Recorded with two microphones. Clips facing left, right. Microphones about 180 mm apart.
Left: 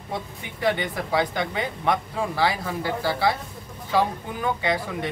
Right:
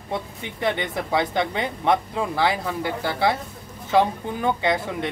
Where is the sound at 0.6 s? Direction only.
20° right (ahead or behind).